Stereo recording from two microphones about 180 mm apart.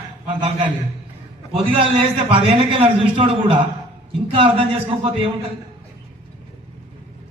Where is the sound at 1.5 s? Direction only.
30° right (ahead or behind).